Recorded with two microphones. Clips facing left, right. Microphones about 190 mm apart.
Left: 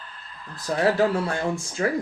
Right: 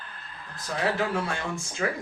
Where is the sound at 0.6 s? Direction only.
35° left (ahead or behind).